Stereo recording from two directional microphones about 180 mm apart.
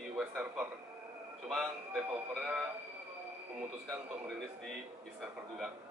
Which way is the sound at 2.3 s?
5° right (ahead or behind).